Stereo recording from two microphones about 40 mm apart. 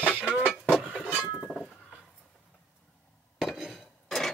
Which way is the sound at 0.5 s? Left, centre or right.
Centre.